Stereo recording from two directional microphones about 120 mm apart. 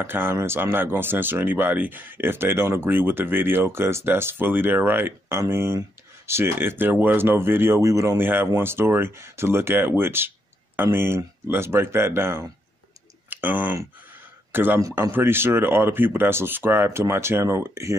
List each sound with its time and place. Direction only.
0.0 s speech: 20° right (ahead or behind)